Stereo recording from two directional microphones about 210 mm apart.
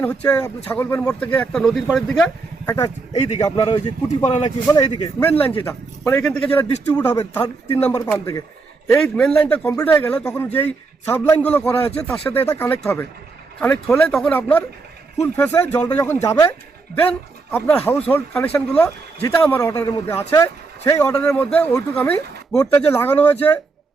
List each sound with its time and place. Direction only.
0.0 s speech: 5° left (ahead or behind)
2.6 s a man's voice: 15° left (ahead or behind)
4.6 s a man's voice: 15° left (ahead or behind)
8.9 s a man's voice: 5° left (ahead or behind)